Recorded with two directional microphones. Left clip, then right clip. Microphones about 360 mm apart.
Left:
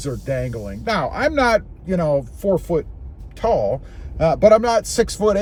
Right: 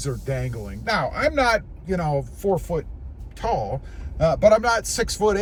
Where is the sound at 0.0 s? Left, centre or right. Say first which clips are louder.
Left 5 dB; centre.